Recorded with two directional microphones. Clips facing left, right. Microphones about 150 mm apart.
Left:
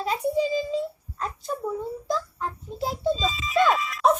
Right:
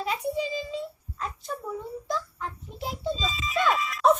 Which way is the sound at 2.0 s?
35° left (ahead or behind).